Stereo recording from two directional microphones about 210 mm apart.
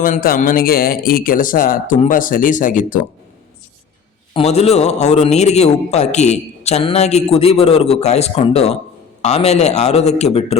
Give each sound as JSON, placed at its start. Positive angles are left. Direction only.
{"t": 0.0, "sound": "speech", "side_deg": 45}
{"t": 4.4, "sound": "speech", "side_deg": 30}